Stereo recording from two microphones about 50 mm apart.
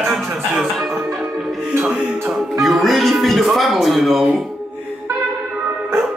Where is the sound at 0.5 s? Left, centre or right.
Centre.